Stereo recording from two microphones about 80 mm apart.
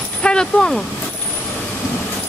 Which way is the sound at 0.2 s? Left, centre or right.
Centre.